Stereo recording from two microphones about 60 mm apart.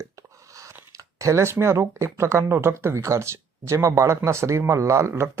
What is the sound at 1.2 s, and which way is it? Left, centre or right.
Speech, right.